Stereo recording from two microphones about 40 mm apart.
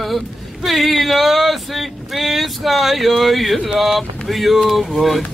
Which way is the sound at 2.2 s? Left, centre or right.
Centre.